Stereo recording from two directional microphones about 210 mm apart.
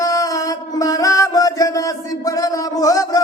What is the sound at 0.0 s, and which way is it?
Mantra, 15° left (ahead or behind).